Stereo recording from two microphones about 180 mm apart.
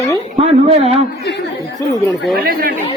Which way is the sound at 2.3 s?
55° right (ahead or behind).